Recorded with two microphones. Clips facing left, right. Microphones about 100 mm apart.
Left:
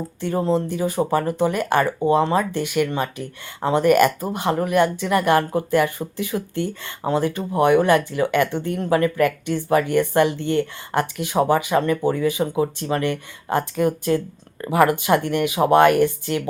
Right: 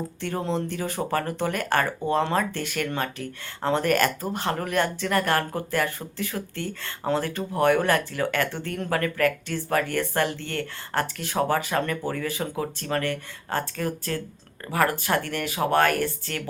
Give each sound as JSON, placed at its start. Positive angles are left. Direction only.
{"t": 0.2, "sound": "speech", "side_deg": 5}